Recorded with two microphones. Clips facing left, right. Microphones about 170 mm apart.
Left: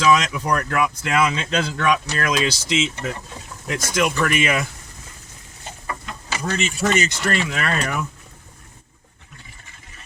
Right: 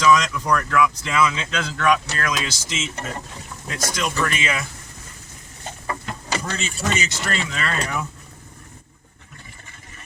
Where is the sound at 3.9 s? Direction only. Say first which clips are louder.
Left 6 dB; 55° left (ahead or behind).